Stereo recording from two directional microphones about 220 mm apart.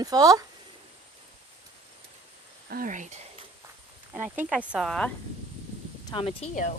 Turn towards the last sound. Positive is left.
turn(degrees=35)  # may be behind; listen again after turning